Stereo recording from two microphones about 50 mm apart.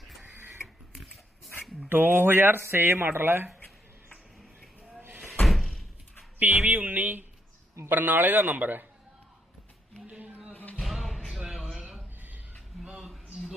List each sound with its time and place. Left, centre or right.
0.2 s printer: right
1.9 s speech: right
5.5 s door: centre
6.4 s a sound: right
7.9 s a man's voice: right
10.0 s a sound: right
10.5 s music: left
10.8 s music: centre
11.3 s a sound: centre